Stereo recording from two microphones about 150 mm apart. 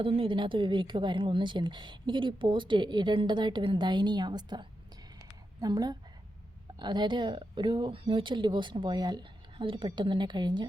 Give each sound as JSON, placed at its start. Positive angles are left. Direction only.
{"t": 0.0, "sound": "a woman's voice", "side_deg": -35}